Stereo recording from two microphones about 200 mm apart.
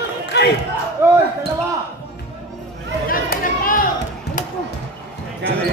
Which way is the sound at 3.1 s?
45° left (ahead or behind).